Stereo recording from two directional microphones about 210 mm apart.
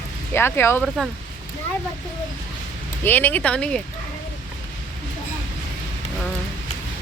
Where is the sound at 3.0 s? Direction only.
10° left (ahead or behind).